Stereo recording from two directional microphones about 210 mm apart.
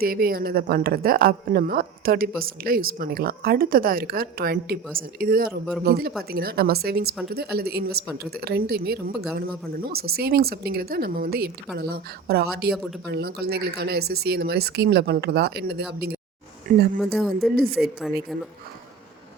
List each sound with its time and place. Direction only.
0.0 s a woman's voice: 45° right (ahead or behind)
17.0 s speech: centre (ahead or behind)
17.5 s a woman's voice: 45° right (ahead or behind)
17.7 s speech: centre (ahead or behind)